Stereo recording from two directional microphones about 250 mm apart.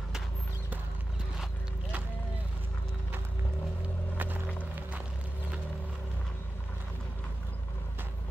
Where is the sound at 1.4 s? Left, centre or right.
Centre.